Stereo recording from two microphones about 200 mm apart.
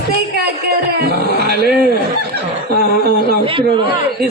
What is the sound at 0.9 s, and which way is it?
A man's voice, 50° right (ahead or behind).